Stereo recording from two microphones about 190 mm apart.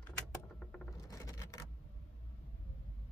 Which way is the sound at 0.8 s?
20° left (ahead or behind).